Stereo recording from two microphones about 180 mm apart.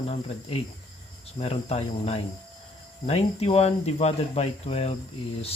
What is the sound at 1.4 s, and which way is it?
Speech, 35° left (ahead or behind).